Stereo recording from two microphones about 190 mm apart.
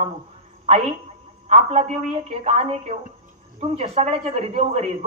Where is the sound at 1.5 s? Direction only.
35° right (ahead or behind).